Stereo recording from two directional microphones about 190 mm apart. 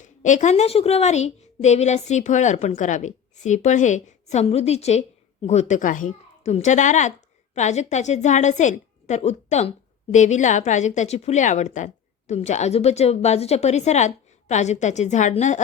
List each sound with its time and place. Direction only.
0.0 s a woman's voice: 40° left (ahead or behind)